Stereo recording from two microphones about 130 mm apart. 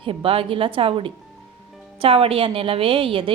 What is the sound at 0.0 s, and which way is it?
A woman's voice, 45° right (ahead or behind).